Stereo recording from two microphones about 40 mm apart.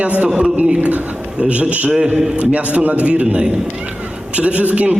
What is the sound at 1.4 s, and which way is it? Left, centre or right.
A man's voice, right.